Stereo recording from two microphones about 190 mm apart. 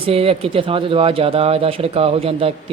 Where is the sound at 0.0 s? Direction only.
30° right (ahead or behind).